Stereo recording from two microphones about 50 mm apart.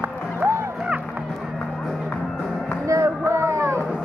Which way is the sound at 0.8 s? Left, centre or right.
Right.